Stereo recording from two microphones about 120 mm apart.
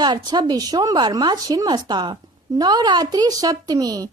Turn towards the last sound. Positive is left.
turn(degrees=-30)  # may be behind; listen again after turning